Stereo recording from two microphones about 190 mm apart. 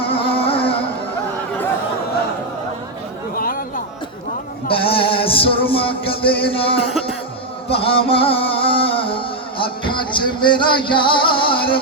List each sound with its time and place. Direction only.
0.0 s music: 30° left (ahead or behind)
3.3 s a sound: 50° left (ahead or behind)
4.7 s music: 30° left (ahead or behind)